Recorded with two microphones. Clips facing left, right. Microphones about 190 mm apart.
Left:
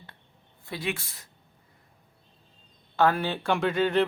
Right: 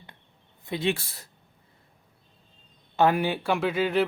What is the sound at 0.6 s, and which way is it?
Speech, 20° right (ahead or behind).